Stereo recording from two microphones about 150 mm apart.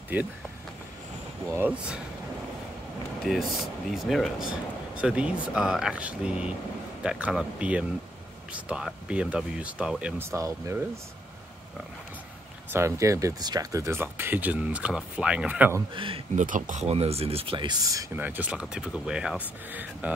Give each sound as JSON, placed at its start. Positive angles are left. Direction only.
{"t": 0.1, "sound": "speech", "side_deg": -10}
{"t": 1.5, "sound": "speech", "side_deg": -10}
{"t": 3.3, "sound": "speech", "side_deg": 0}
{"t": 12.7, "sound": "speech", "side_deg": -20}
{"t": 15.9, "sound": "speech", "side_deg": -35}
{"t": 16.3, "sound": "speech", "side_deg": -60}
{"t": 18.2, "sound": "speech", "side_deg": -10}